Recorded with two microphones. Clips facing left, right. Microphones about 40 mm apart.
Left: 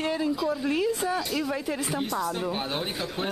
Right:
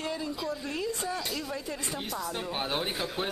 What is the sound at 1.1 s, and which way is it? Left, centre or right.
Speech, centre.